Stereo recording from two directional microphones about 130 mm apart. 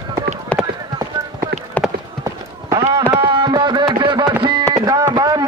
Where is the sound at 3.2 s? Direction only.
40° right (ahead or behind).